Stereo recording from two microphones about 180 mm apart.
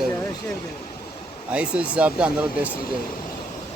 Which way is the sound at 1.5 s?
5° right (ahead or behind).